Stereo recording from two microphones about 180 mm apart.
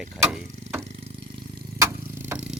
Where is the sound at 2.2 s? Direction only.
10° right (ahead or behind).